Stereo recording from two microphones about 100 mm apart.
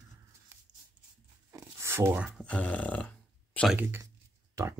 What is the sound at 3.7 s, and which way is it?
Speech, 25° right (ahead or behind).